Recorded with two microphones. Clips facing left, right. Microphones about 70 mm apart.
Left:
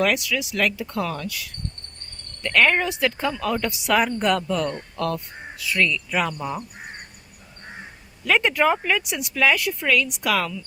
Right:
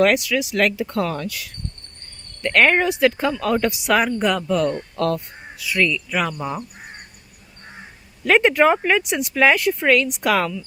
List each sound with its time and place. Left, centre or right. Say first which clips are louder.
0.0 s speech: right 5 dB; right
1.0 s speech: right 3 dB; centre
2.5 s speech: right 3 dB; centre
4.5 s speech: right 5 dB; centre
5.5 s speech: right 2 dB; centre
6.3 s speech: right 2 dB; centre
8.3 s speech: right 4 dB; right